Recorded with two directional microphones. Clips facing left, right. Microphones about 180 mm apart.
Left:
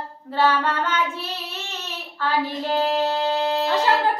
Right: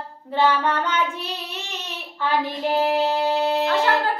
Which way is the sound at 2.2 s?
15° right (ahead or behind).